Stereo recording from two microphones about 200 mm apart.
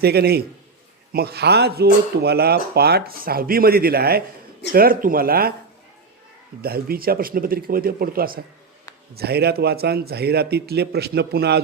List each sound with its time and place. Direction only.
0.0 s speech: 50° right (ahead or behind)
6.6 s speech: 50° right (ahead or behind)